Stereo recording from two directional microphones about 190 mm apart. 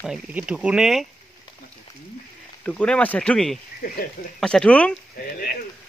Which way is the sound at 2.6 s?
5° left (ahead or behind).